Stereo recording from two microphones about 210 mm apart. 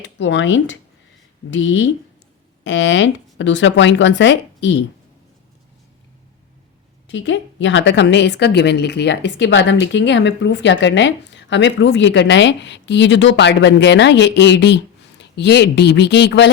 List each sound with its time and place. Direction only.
0.2 s a woman's voice: 60° left (ahead or behind)
7.1 s a woman's voice: 60° left (ahead or behind)